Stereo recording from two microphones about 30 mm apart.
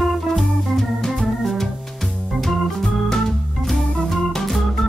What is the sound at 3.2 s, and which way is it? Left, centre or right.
Organ, centre.